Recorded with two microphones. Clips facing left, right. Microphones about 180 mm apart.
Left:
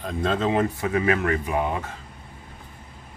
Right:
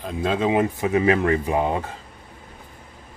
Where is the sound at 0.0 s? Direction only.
5° right (ahead or behind); by 1.8 s 25° right (ahead or behind).